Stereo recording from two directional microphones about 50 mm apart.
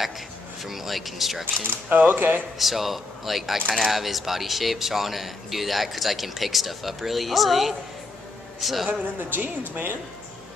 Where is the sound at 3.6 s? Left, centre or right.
Centre.